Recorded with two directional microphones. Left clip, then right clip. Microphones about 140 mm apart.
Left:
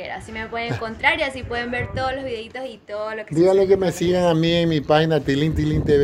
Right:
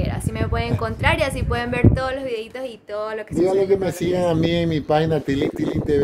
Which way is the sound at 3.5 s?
10° left (ahead or behind).